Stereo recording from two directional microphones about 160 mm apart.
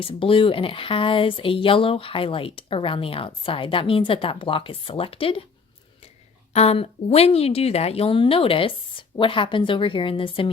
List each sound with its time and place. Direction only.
0.0 s speech: 35° left (ahead or behind)
6.5 s speech: 40° left (ahead or behind)